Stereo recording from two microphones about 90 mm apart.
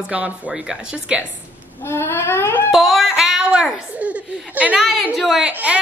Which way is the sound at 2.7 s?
Centre (ahead or behind).